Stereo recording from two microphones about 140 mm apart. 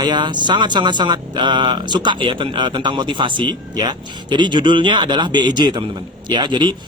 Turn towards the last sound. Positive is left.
turn(degrees=-35)  # may be behind; listen again after turning